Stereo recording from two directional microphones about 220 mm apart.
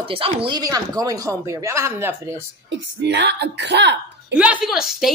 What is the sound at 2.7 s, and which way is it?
A woman's voice, 50° right (ahead or behind).